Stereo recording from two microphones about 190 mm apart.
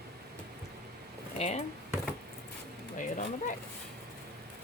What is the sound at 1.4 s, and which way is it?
Speech, 35° left (ahead or behind).